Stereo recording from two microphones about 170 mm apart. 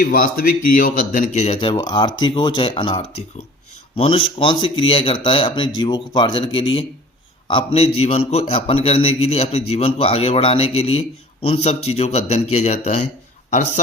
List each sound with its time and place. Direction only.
0.0 s a man's voice: 60° left (ahead or behind); by 13.0 s 40° left (ahead or behind)